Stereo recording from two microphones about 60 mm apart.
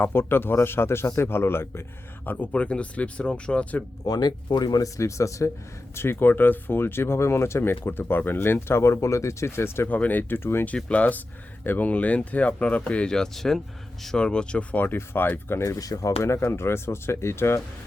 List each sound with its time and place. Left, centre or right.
0.0 s speech: left
2.2 s speech: left
4.1 s speech: left
4.7 s speech: left
6.0 s speech: left
9.9 s speech: left
10.8 s speech: left
13.1 s speech: centre
14.9 s speech: left
15.6 s speech: left